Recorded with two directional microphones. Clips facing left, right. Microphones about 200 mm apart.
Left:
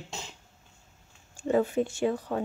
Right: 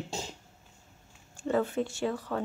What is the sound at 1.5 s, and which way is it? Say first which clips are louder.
Speech: left 3 dB; 15° left (ahead or behind).